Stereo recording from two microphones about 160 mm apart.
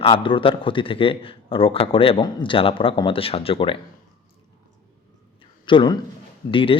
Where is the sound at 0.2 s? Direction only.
35° left (ahead or behind).